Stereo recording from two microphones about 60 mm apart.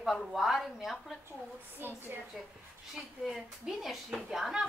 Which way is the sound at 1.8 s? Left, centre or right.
Right.